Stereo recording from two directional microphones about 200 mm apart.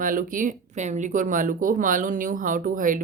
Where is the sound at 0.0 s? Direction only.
40° right (ahead or behind).